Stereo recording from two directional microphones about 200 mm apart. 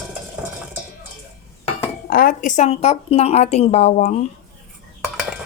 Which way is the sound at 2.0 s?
45° left (ahead or behind).